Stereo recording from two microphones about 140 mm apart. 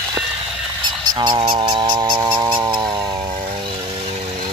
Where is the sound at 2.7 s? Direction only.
35° right (ahead or behind).